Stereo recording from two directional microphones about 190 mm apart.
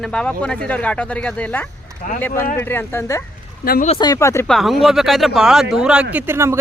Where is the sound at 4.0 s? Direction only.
15° left (ahead or behind).